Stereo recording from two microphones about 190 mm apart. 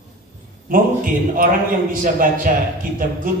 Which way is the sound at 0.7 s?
45° right (ahead or behind).